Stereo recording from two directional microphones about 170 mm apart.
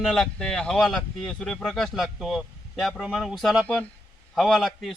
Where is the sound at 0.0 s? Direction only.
Centre (ahead or behind).